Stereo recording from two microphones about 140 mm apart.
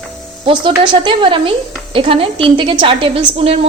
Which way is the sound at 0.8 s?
35° right (ahead or behind).